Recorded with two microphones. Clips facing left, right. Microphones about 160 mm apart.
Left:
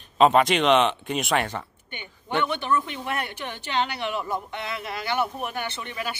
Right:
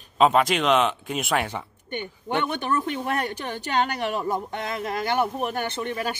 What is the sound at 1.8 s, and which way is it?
Speech, 45° right (ahead or behind).